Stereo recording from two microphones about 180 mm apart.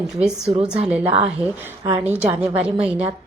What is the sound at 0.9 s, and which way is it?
Speech, 10° right (ahead or behind).